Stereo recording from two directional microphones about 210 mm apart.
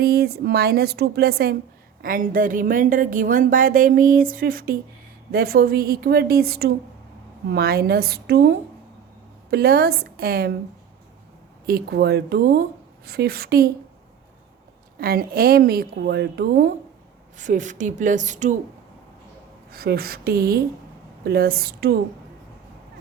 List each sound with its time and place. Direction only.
0.0 s a woman's voice: 50° right (ahead or behind)
11.6 s a woman's voice: 45° right (ahead or behind)
14.9 s a woman's voice: 45° right (ahead or behind)
17.3 s speech: 35° right (ahead or behind)
19.7 s a woman's voice: 45° right (ahead or behind)